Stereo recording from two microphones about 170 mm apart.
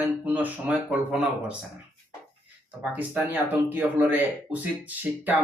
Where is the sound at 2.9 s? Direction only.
10° right (ahead or behind).